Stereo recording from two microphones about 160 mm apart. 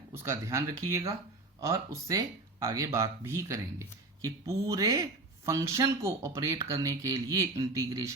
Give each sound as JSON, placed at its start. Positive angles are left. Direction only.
{"t": 0.1, "sound": "speech", "side_deg": -15}